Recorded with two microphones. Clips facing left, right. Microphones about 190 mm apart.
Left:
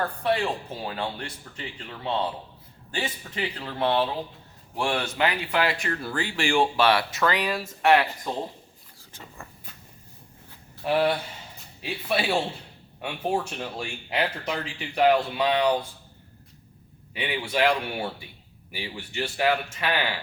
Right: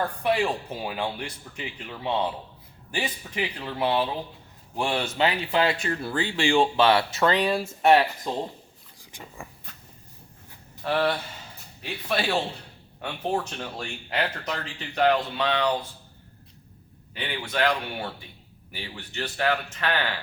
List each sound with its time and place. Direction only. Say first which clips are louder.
0.2 s speech: right 1 dB; 15° right (ahead or behind)
4.8 s speech: right 1 dB; 20° right (ahead or behind)
10.8 s speech: left 2 dB; 15° left (ahead or behind)
17.2 s speech: left 2 dB; 10° left (ahead or behind)